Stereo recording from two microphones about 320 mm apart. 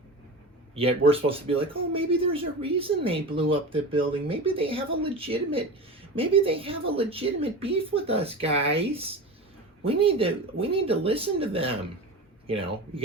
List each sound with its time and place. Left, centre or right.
0.8 s a woman's voice: centre